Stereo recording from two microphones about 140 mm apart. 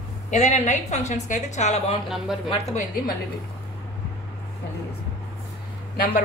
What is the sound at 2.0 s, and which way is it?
Speech, centre (ahead or behind).